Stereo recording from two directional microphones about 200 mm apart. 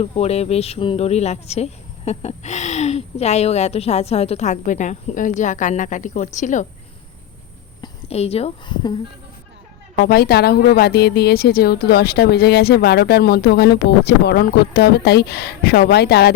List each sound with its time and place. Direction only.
0.0 s speech: 30° left (ahead or behind)
7.8 s speech: 30° left (ahead or behind)
10.0 s a woman's voice: 50° left (ahead or behind)